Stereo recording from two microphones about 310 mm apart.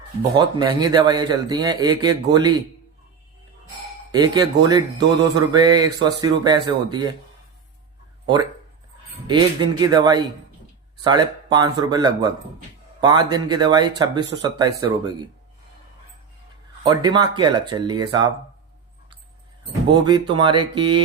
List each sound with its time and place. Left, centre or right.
0.2 s a man's voice: centre
4.1 s a man's voice: centre
9.2 s a man's voice: centre
16.8 s a man's voice: centre
19.9 s a man's voice: centre